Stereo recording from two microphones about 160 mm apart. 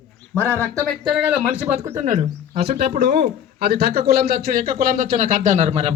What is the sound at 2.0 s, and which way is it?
Speech, 40° right (ahead or behind).